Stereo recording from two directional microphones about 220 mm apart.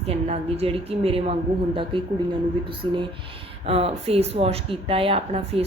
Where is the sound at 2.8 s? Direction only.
20° right (ahead or behind).